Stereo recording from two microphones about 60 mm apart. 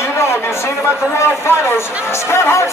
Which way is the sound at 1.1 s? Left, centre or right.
Left.